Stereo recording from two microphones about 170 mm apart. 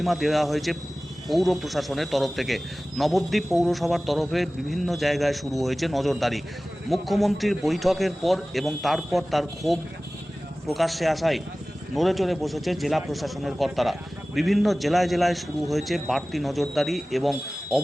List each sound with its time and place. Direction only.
0.0 s a man's voice: centre (ahead or behind)